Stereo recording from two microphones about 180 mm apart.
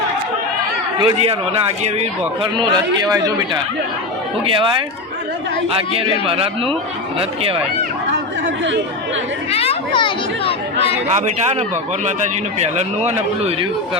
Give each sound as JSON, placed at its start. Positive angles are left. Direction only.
{"t": 0.9, "sound": "a man's voice", "side_deg": -30}
{"t": 5.6, "sound": "speech", "side_deg": -30}
{"t": 9.5, "sound": "a child's voice", "side_deg": 35}
{"t": 11.1, "sound": "speech", "side_deg": -40}